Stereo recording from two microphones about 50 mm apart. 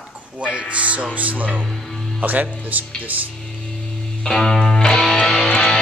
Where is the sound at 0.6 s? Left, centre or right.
Right.